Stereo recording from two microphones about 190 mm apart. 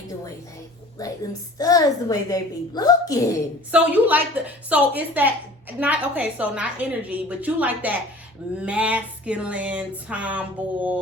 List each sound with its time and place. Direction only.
0.9 s a woman's voice: 20° left (ahead or behind)
3.7 s a woman's voice: 10° right (ahead or behind)